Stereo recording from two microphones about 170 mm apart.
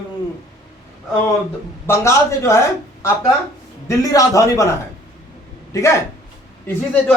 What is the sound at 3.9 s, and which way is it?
Speech, 20° left (ahead or behind).